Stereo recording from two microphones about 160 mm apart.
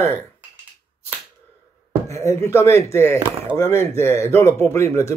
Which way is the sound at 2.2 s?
15° left (ahead or behind).